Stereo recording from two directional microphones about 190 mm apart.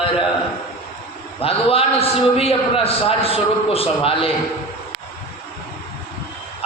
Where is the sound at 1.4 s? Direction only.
30° left (ahead or behind).